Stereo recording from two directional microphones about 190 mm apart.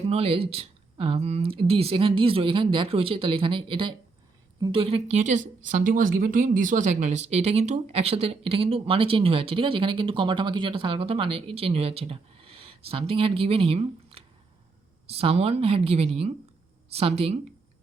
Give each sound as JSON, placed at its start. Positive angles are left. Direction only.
{"t": 0.1, "sound": "a woman's voice", "side_deg": -30}